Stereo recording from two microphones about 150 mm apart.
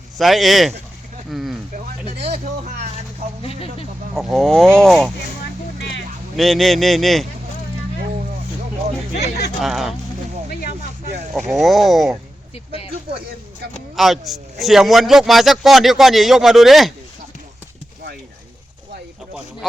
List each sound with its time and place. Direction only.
0.2 s a man's voice: centre (ahead or behind)
1.7 s vehicle: 50° right (ahead or behind)
3.4 s a sound: 40° left (ahead or behind)
4.1 s a man's voice: centre (ahead or behind)
6.3 s a man's voice: centre (ahead or behind)
9.6 s a man's voice: centre (ahead or behind)
11.3 s a man's voice: centre (ahead or behind)
13.9 s a man's voice: centre (ahead or behind)